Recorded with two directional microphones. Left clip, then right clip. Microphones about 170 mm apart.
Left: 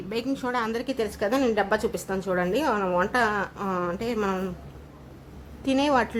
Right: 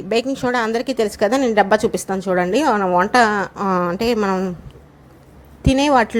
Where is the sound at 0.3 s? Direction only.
35° right (ahead or behind).